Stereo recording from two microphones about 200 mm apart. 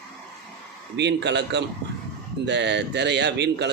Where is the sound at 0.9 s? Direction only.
60° right (ahead or behind).